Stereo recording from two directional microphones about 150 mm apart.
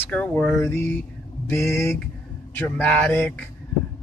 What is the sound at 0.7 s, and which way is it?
Speech, 15° left (ahead or behind).